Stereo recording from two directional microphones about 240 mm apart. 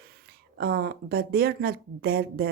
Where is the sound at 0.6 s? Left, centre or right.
Right.